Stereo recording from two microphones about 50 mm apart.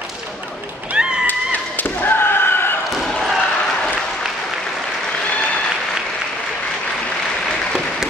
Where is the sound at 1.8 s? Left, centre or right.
Left.